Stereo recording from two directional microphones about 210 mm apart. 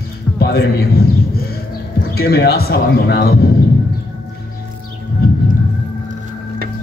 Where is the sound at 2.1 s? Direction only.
50° left (ahead or behind).